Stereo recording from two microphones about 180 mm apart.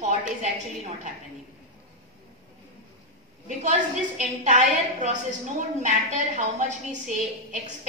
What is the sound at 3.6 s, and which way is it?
A woman's voice, 40° right (ahead or behind).